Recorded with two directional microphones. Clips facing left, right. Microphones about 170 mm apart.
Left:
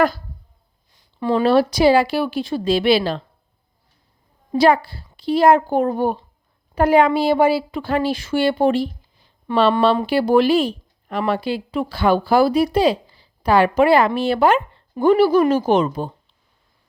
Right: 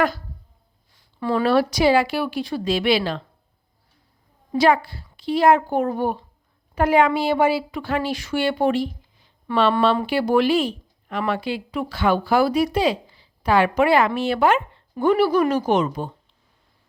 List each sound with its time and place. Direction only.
0.9 s speech: 20° left (ahead or behind)
4.5 s speech: 30° left (ahead or behind)